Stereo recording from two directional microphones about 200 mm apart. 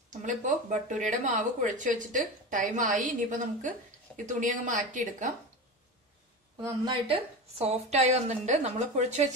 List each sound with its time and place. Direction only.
0.1 s a woman's voice: 40° right (ahead or behind)
6.6 s a woman's voice: 25° right (ahead or behind)